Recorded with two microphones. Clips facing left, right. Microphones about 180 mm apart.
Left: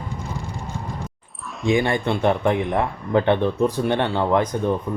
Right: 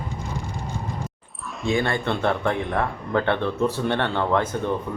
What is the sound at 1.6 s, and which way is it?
A man's voice, 15° left (ahead or behind).